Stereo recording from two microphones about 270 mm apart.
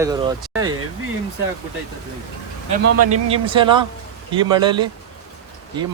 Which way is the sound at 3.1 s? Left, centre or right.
Centre.